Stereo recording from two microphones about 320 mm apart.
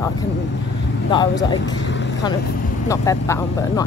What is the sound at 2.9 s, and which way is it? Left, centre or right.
Speech, centre.